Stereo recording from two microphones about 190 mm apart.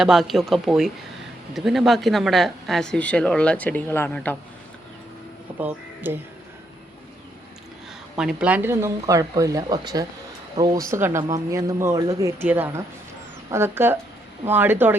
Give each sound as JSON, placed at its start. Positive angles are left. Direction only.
{"t": 0.0, "sound": "speech", "side_deg": 0}
{"t": 5.5, "sound": "speech", "side_deg": -10}
{"t": 8.1, "sound": "speech", "side_deg": -5}